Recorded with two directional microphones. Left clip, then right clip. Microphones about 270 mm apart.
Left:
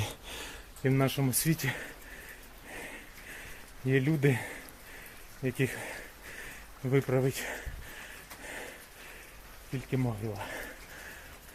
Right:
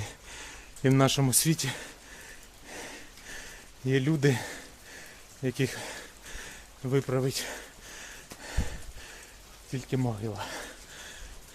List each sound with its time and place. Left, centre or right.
0.0 s a sound: centre
0.8 s speech: right
1.3 s speech: centre
3.8 s speech: centre
9.9 s speech: centre